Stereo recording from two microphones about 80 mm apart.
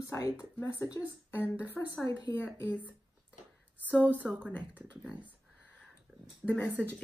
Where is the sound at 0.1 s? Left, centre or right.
Left.